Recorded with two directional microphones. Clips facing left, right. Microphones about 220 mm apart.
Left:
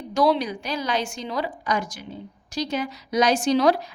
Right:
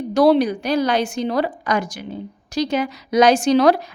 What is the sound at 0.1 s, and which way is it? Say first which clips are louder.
A woman's voice: right 6 dB; 60° right (ahead or behind).